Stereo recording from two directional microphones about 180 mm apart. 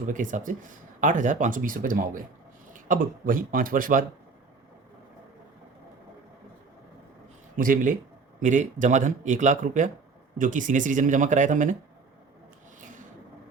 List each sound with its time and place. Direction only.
0.1 s speech: 45° right (ahead or behind)
7.5 s speech: 50° right (ahead or behind)